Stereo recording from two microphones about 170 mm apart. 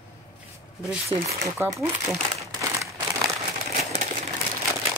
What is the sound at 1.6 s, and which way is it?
Speech, 15° right (ahead or behind).